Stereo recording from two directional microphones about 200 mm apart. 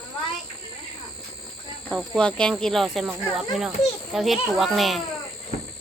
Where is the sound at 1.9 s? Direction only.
5° left (ahead or behind).